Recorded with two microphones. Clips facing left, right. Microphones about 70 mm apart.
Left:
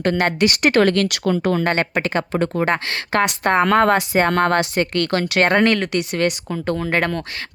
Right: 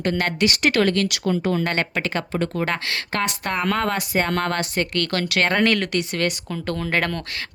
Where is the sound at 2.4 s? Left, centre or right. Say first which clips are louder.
Left 5 dB; left.